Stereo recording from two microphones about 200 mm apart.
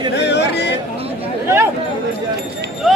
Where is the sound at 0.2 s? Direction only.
60° left (ahead or behind).